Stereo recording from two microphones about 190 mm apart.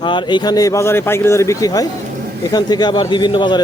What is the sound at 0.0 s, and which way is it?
A man's voice, 25° left (ahead or behind).